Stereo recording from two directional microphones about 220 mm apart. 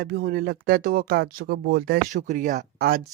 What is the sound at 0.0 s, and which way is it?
Speech, 40° right (ahead or behind).